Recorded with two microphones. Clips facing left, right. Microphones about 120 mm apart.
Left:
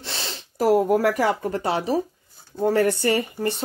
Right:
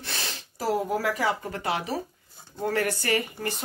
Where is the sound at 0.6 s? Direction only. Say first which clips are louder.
Left 8 dB; 55° left (ahead or behind).